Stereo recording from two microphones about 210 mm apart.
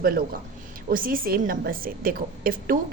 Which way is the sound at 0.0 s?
45° right (ahead or behind).